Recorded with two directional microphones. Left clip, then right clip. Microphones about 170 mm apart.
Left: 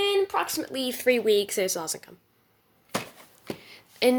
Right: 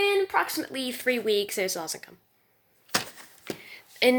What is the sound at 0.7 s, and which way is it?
Speech, 10° left (ahead or behind).